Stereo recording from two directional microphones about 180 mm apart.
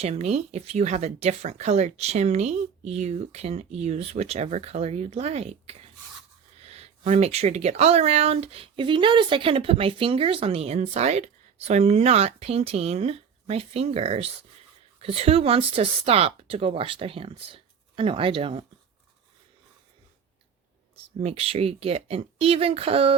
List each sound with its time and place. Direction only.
0.0 s speech: 35° right (ahead or behind)
21.2 s speech: 35° right (ahead or behind)